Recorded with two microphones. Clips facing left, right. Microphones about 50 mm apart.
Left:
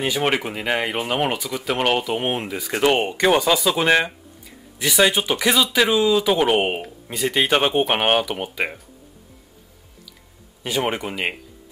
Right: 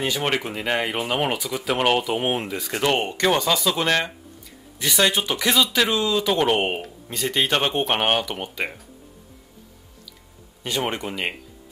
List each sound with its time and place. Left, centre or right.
0.0 s speech: centre
2.8 s speech: centre
10.6 s speech: centre